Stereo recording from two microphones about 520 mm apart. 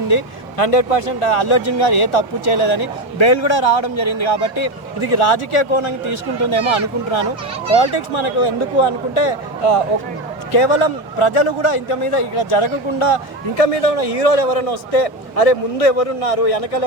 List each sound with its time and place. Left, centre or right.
0.1 s a man's voice: left
13.6 s a man's voice: left